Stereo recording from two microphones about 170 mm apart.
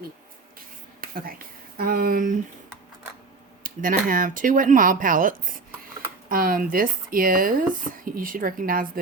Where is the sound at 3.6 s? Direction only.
55° right (ahead or behind).